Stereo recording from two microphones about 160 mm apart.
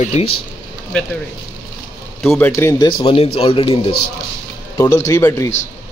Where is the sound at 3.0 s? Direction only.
40° left (ahead or behind).